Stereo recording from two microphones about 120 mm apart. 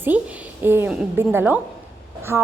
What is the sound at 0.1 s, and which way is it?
A woman's voice, 10° right (ahead or behind).